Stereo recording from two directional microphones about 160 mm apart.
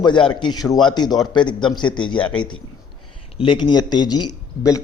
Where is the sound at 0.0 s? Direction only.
30° left (ahead or behind).